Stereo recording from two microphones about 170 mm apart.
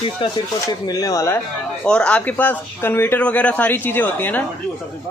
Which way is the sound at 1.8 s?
5° left (ahead or behind).